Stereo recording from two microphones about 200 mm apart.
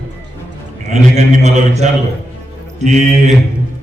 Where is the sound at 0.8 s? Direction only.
35° right (ahead or behind).